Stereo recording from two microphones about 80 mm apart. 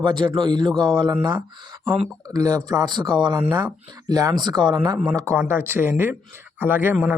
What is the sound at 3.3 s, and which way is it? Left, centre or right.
Speech, right.